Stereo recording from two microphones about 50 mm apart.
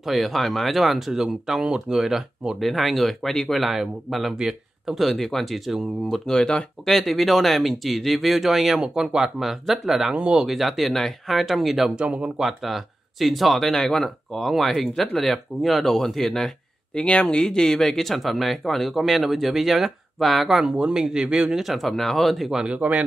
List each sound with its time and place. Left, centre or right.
0.0 s speech: centre
2.6 s speech: centre
3.5 s speech: centre
4.9 s speech: centre
8.8 s speech: centre
11.9 s speech: right
12.4 s speech: centre
16.9 s speech: centre
20.7 s a man's voice: centre
21.5 s speech: centre
22.7 s speech: right